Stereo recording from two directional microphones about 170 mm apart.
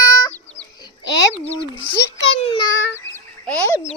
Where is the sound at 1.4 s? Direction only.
35° left (ahead or behind).